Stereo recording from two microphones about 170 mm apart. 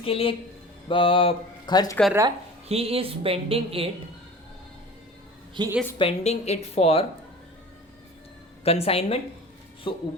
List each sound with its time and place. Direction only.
0.0 s speech: 35° left (ahead or behind)
2.6 s speech: 35° right (ahead or behind)
5.6 s a woman's voice: 25° right (ahead or behind)
6.0 s speech: 35° left (ahead or behind)
8.6 s speech: 35° left (ahead or behind)